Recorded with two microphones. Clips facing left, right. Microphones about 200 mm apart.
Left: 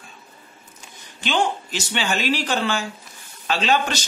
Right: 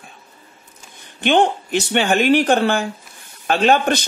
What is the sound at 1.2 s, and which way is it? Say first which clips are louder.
Speech: right 7 dB; 60° right (ahead or behind).